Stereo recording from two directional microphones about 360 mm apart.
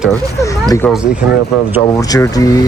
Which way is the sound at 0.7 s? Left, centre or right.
Centre.